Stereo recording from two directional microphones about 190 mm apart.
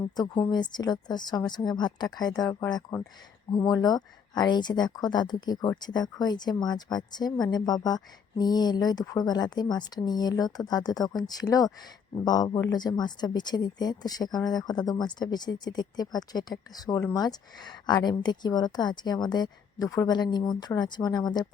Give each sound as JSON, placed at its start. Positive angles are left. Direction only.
{"t": 0.2, "sound": "speech", "side_deg": 20}